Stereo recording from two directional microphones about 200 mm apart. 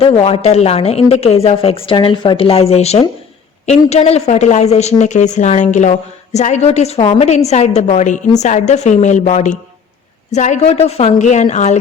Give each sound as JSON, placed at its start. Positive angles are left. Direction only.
{"t": 0.0, "sound": "a woman's voice", "side_deg": 30}